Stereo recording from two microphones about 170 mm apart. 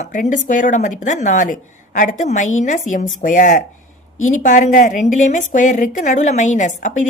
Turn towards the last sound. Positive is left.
turn(degrees=50)  # may be behind; listen again after turning